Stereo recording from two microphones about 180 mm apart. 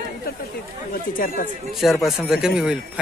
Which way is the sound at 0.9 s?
50° left (ahead or behind).